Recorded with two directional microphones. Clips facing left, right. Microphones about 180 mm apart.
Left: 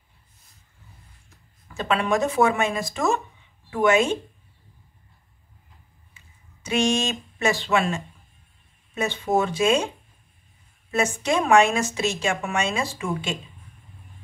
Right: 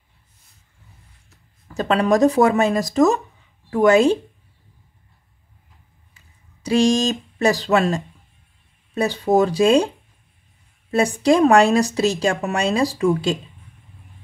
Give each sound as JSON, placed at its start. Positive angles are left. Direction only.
{"t": 1.7, "sound": "speech", "side_deg": -40}
{"t": 6.1, "sound": "speech", "side_deg": -35}